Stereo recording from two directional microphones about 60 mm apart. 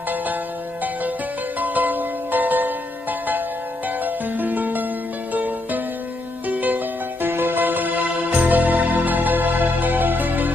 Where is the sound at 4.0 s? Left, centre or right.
Right.